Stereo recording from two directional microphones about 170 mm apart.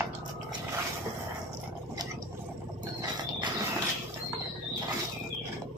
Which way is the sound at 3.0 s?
25° right (ahead or behind).